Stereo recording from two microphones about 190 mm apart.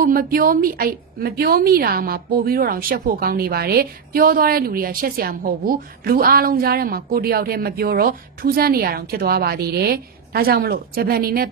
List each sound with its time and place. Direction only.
0.0 s speech: 50° right (ahead or behind)